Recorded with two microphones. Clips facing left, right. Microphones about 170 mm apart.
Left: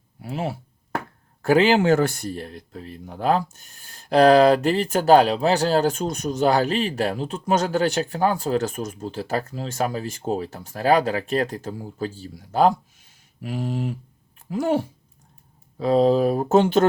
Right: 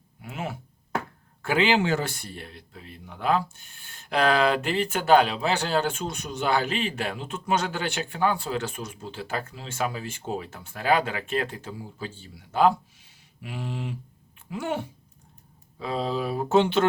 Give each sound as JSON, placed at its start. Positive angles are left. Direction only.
{"t": 0.2, "sound": "speech", "side_deg": 35}